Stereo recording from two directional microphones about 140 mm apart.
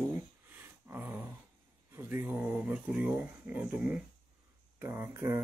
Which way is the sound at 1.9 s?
15° right (ahead or behind).